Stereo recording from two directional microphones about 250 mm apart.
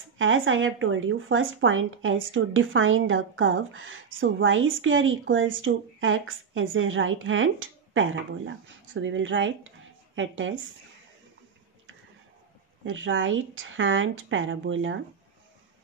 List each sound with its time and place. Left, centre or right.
0.2 s speech: right
12.8 s speech: right